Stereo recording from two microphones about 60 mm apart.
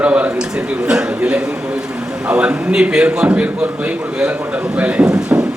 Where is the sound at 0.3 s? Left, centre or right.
Centre.